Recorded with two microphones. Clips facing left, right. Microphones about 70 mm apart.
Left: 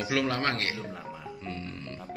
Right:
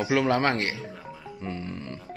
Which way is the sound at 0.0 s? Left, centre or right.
Right.